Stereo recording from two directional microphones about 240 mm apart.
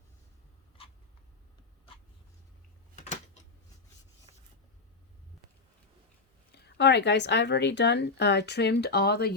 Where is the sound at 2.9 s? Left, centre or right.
Left.